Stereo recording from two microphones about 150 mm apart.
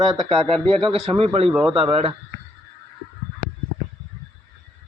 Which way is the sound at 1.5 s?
5° right (ahead or behind).